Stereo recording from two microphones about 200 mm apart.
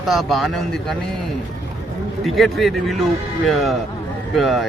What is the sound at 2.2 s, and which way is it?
Speech, centre (ahead or behind).